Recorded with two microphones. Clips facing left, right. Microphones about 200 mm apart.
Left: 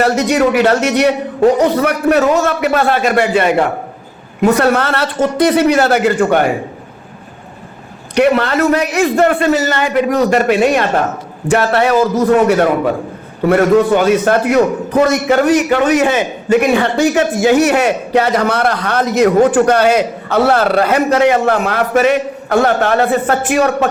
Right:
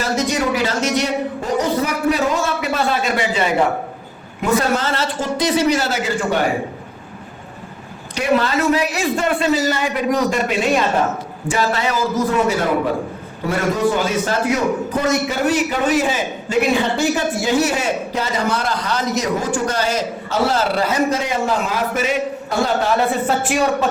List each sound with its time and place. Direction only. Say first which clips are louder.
0.0 s a man's voice: left 7 dB; 65° left (ahead or behind)
4.5 s a man's voice: left 5 dB; 65° left (ahead or behind)
8.1 s a man's voice: left 6 dB; 65° left (ahead or behind)
13.5 s a man's voice: left 8 dB; 60° left (ahead or behind)
15.3 s a man's voice: left 8 dB; 75° left (ahead or behind)